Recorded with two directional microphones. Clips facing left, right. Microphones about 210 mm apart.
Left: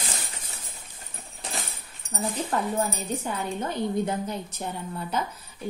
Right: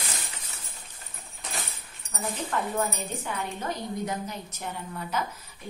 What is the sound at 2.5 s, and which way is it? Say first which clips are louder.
A woman's voice: left 1 dB; 35° left (ahead or behind).